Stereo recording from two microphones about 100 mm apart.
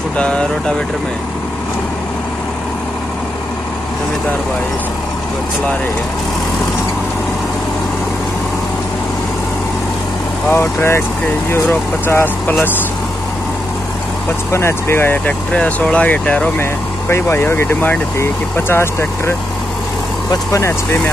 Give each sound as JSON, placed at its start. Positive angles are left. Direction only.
{"t": 0.2, "sound": "speech", "side_deg": 10}
{"t": 10.5, "sound": "speech", "side_deg": 25}
{"t": 14.5, "sound": "speech", "side_deg": 25}
{"t": 15.5, "sound": "speech", "side_deg": 10}
{"t": 17.1, "sound": "speech", "side_deg": 25}